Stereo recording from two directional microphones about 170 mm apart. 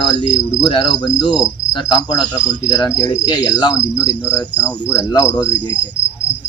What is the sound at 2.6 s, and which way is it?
Speech, 20° left (ahead or behind).